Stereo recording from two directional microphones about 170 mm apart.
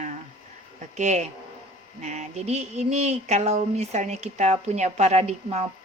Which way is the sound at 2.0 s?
45° right (ahead or behind).